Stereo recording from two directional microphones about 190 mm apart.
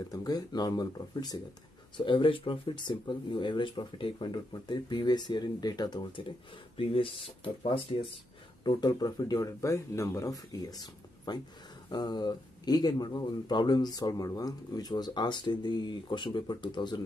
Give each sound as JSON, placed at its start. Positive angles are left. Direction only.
{"t": 0.1, "sound": "speech", "side_deg": 20}